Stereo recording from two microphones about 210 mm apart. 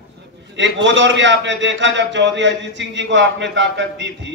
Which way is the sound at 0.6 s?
60° right (ahead or behind).